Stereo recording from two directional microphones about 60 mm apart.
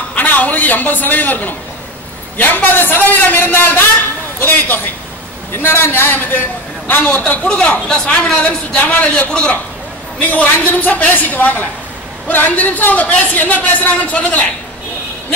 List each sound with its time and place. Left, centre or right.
0.1 s a man's voice: left
7.2 s speech: centre